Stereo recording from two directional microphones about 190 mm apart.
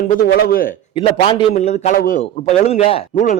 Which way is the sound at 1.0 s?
25° left (ahead or behind).